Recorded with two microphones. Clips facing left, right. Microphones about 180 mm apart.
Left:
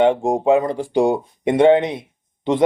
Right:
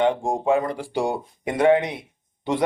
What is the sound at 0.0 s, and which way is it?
Speech, 20° left (ahead or behind).